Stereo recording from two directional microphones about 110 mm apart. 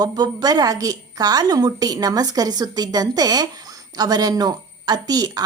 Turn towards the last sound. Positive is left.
turn(degrees=-35)  # may be behind; listen again after turning